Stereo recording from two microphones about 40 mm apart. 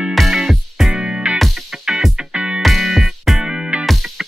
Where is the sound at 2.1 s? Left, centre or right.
Right.